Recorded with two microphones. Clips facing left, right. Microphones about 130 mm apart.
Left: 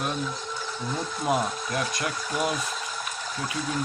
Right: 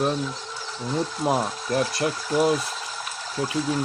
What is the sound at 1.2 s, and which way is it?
Speech, 35° right (ahead or behind).